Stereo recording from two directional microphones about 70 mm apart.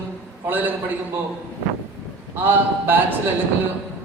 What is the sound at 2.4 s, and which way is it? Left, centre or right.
Speech, right.